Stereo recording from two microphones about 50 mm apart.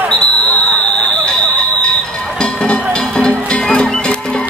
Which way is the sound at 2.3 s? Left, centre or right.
Centre.